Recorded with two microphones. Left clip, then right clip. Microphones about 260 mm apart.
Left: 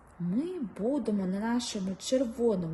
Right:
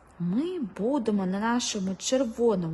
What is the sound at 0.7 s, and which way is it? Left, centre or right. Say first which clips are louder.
Speech: right 3 dB; centre.